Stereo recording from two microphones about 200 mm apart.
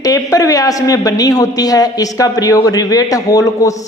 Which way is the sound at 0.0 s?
15° left (ahead or behind).